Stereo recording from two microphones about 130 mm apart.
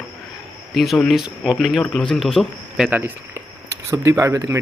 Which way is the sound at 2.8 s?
15° right (ahead or behind).